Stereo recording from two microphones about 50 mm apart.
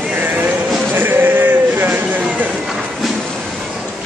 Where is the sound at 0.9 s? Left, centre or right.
Right.